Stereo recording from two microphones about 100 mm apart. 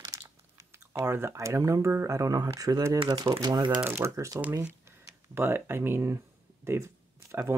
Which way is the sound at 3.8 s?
25° right (ahead or behind).